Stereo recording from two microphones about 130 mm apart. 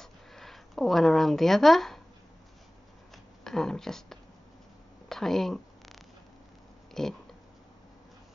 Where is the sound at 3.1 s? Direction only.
5° left (ahead or behind).